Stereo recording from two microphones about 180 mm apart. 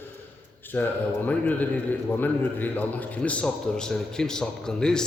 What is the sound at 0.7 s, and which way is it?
A man's voice, 10° left (ahead or behind).